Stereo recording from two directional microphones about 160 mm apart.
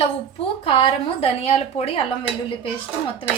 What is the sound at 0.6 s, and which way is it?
A woman's voice, 35° left (ahead or behind).